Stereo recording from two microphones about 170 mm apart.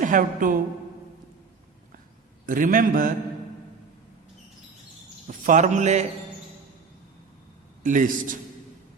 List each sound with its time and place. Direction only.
0.0 s a woman's voice: 50° right (ahead or behind)
2.5 s a man's voice: 55° right (ahead or behind)
5.5 s a man's voice: 45° right (ahead or behind)
7.9 s a man's voice: 50° right (ahead or behind)